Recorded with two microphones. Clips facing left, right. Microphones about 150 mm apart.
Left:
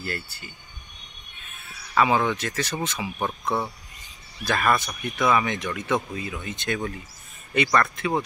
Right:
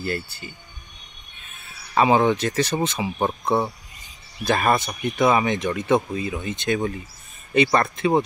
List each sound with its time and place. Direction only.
2.0 s speech: 25° right (ahead or behind)